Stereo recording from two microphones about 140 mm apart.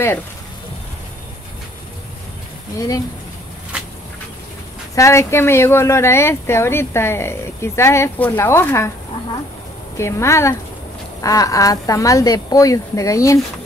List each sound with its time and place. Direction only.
4.9 s speech: 20° left (ahead or behind)
9.9 s speech: 20° left (ahead or behind)